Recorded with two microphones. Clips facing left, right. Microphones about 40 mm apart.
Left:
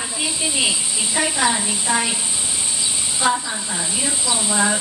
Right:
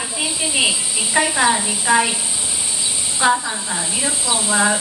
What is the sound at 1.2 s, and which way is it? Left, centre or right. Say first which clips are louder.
Speech: right 3 dB; centre.